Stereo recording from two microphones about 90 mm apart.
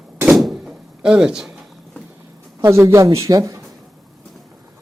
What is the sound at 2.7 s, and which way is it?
Speech, 30° right (ahead or behind).